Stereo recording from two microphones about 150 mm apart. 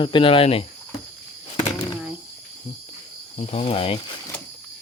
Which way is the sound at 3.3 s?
45° left (ahead or behind).